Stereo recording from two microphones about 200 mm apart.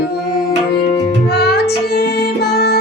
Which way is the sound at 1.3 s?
55° left (ahead or behind).